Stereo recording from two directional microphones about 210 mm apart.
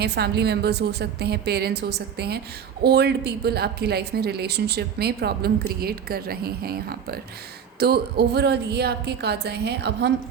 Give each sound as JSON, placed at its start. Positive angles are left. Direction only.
{"t": 0.0, "sound": "speech", "side_deg": -50}